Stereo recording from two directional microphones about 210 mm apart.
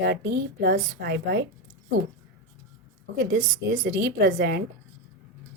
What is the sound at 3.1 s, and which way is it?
A woman's voice, 45° right (ahead or behind).